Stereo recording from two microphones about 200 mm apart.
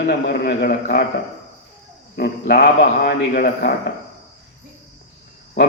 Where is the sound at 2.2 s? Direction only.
55° left (ahead or behind).